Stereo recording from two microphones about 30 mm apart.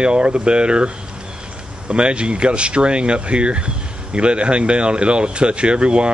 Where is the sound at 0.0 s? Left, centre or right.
Right.